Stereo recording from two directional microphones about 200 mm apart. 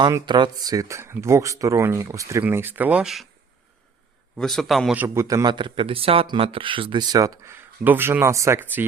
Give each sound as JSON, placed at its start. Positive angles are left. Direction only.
{"t": 0.0, "sound": "speech", "side_deg": -20}
{"t": 4.4, "sound": "a man's voice", "side_deg": 0}
{"t": 5.0, "sound": "speech", "side_deg": -15}